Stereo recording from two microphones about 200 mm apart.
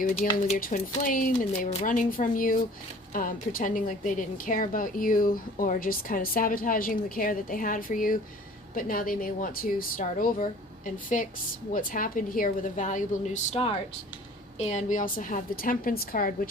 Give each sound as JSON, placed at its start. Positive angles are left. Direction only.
{"t": 0.0, "sound": "a woman's voice", "side_deg": 40}